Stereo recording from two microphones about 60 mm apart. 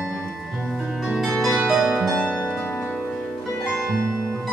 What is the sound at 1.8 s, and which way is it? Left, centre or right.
Harp, centre.